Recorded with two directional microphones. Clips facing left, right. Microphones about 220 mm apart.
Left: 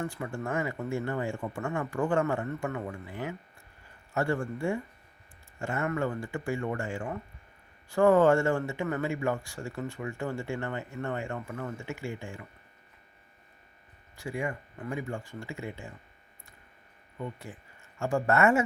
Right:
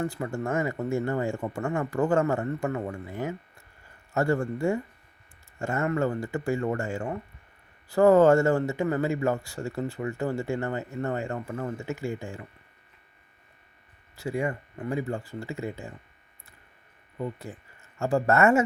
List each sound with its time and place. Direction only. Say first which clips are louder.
0.0 s speech: right 4 dB; 40° right (ahead or behind)
14.2 s speech: right 5 dB; 40° right (ahead or behind)
17.2 s speech: right 5 dB; 35° right (ahead or behind)